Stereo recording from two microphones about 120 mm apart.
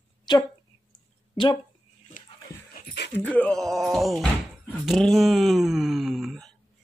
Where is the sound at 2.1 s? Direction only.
90° left.